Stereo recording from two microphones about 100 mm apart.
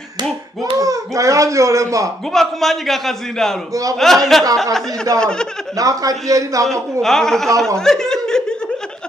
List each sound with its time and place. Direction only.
0.7 s speech: 35° right (ahead or behind)
2.3 s a man's voice: centre (ahead or behind)
5.8 s a man's voice: 35° right (ahead or behind)
7.0 s a man's voice: 5° left (ahead or behind)